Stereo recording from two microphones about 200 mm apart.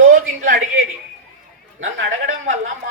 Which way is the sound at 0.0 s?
45° right (ahead or behind).